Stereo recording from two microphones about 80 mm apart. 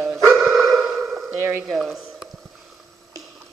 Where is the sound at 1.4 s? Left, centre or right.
Right.